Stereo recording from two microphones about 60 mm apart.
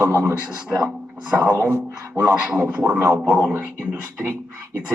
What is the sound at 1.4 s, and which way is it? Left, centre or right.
Speech, right.